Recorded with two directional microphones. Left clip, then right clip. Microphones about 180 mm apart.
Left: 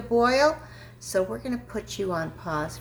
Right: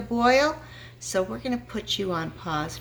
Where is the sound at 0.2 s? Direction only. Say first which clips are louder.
Right 1 dB; 60° right (ahead or behind).